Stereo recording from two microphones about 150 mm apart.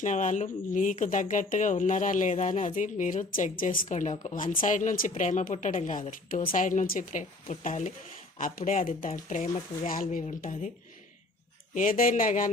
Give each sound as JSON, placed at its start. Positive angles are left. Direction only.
{"t": 0.0, "sound": "speech", "side_deg": 55}
{"t": 11.7, "sound": "speech", "side_deg": 65}